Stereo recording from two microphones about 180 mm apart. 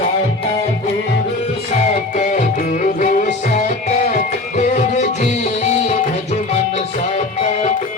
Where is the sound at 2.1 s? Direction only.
40° left (ahead or behind).